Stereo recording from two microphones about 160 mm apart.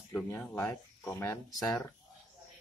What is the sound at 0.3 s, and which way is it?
Speech, 10° left (ahead or behind).